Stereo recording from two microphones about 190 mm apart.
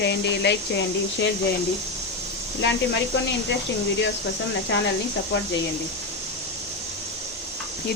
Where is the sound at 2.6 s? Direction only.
65° left (ahead or behind).